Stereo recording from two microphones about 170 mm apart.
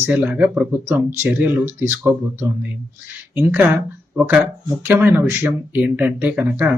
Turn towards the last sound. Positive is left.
turn(degrees=-10)  # may be behind; listen again after turning